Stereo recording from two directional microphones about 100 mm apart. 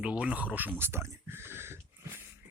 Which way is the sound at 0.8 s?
25° right (ahead or behind).